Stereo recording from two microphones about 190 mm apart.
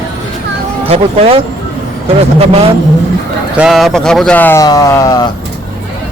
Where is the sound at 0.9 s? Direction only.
30° right (ahead or behind).